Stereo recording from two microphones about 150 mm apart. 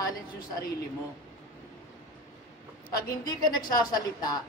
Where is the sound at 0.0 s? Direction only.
25° left (ahead or behind).